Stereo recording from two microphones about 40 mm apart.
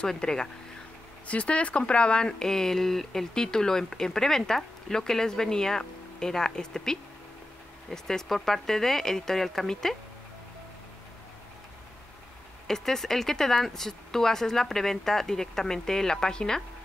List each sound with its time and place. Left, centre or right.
0.2 s speech: centre
1.2 s speech: left; by 9.9 s centre
12.6 s speech: centre